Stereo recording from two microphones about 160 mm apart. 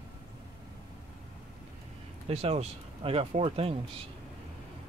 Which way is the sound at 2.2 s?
40° right (ahead or behind).